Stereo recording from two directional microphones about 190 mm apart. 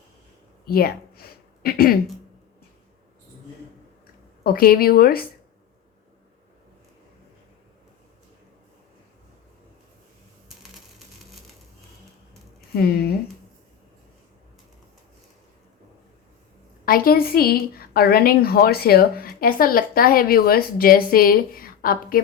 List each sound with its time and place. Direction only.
0.6 s a sound: 55° left (ahead or behind)
4.4 s a woman's voice: 50° left (ahead or behind)
12.7 s speech: 55° left (ahead or behind)
16.8 s a woman's voice: 50° left (ahead or behind)